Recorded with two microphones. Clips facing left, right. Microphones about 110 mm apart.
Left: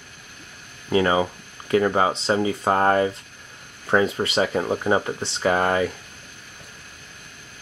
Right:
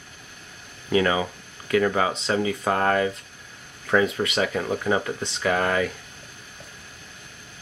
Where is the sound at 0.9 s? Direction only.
30° left (ahead or behind).